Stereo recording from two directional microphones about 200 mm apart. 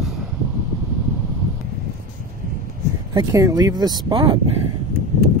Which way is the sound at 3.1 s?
15° right (ahead or behind).